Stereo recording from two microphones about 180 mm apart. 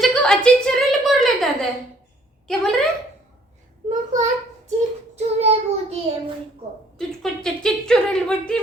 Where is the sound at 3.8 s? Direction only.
40° right (ahead or behind).